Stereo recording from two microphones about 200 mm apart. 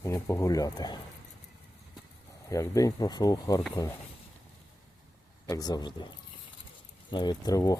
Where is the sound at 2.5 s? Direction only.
15° left (ahead or behind).